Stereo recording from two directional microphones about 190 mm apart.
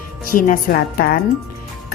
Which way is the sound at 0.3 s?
45° left (ahead or behind).